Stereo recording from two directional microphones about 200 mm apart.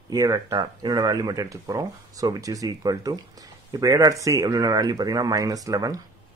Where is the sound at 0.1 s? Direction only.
15° right (ahead or behind).